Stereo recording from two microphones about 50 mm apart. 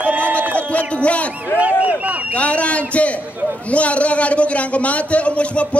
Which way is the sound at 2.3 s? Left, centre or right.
Left.